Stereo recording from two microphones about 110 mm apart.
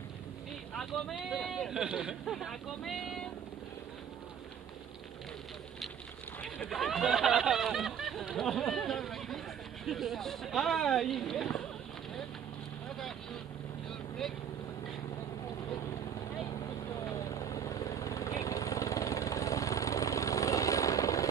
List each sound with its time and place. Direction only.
0.7 s speech: centre (ahead or behind)
6.7 s speech: centre (ahead or behind)
17.3 s vehicle: 30° left (ahead or behind)